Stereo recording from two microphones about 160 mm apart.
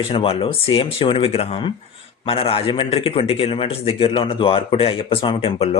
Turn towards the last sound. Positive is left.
turn(degrees=40)  # may be behind; listen again after turning